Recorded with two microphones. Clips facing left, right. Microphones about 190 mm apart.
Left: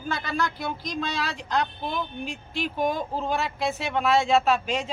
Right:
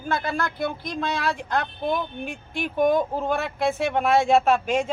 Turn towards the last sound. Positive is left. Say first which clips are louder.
# right 3 dB
turn(degrees=-50)  # may be behind; listen again after turning